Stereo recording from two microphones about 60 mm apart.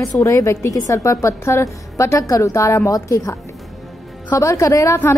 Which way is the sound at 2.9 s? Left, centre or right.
Left.